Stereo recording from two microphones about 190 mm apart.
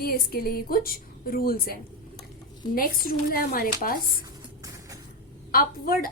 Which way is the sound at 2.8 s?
50° left (ahead or behind).